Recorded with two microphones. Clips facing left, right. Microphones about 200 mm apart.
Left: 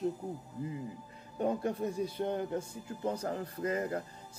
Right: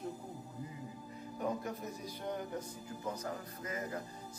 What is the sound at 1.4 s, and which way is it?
A man's voice, 30° left (ahead or behind).